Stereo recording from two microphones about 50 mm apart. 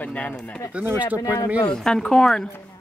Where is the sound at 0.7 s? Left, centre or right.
Right.